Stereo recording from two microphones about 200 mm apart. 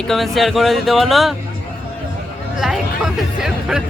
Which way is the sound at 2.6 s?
Centre (ahead or behind).